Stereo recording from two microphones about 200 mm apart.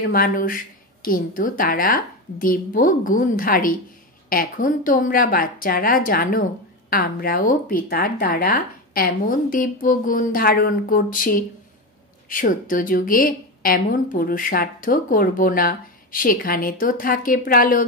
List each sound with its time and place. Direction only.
0.0 s a woman's voice: 45° left (ahead or behind)